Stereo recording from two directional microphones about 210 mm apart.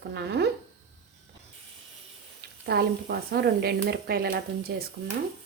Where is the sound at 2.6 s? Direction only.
50° right (ahead or behind).